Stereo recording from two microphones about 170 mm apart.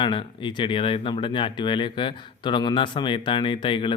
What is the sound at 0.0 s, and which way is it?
Speech, 30° left (ahead or behind).